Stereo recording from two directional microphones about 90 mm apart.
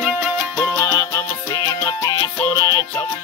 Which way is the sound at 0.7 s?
35° left (ahead or behind).